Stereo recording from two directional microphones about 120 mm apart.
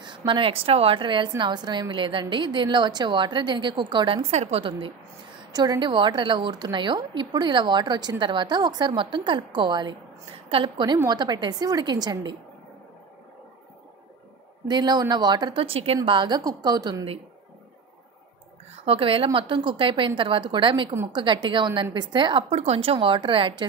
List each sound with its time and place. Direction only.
0.0 s speech: 40° right (ahead or behind)
4.2 s a woman's voice: 60° right (ahead or behind)
5.5 s speech: 35° right (ahead or behind)
14.7 s speech: 35° right (ahead or behind)
15.6 s speech: 50° right (ahead or behind); by 17.0 s 35° right (ahead or behind)
18.9 s a woman's voice: 50° right (ahead or behind)
22.5 s a woman's voice: 55° right (ahead or behind)